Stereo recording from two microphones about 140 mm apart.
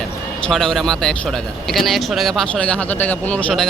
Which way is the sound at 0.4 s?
5° left (ahead or behind).